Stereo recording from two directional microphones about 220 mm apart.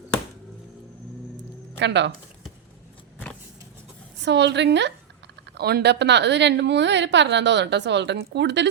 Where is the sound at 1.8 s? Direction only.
55° right (ahead or behind).